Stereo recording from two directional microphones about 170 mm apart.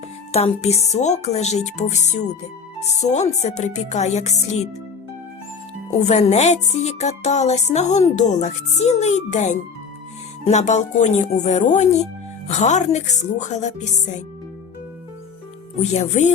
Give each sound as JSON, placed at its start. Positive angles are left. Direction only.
{"t": 0.3, "sound": "speech", "side_deg": 40}
{"t": 6.0, "sound": "speech", "side_deg": 40}
{"t": 15.8, "sound": "speech", "side_deg": 40}